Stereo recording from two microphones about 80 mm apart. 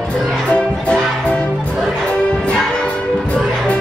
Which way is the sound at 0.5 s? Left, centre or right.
Centre.